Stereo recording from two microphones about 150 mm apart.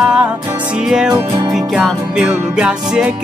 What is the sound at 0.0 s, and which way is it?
Music, 5° right (ahead or behind).